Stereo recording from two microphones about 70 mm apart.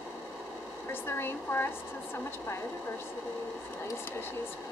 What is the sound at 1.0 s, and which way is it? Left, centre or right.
Speech, left.